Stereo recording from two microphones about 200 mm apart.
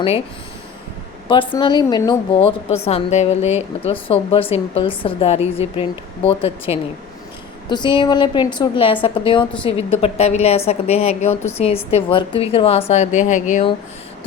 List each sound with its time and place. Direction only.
1.3 s a woman's voice: 25° left (ahead or behind)